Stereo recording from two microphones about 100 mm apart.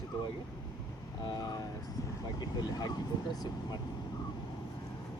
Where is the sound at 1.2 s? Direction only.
45° left (ahead or behind).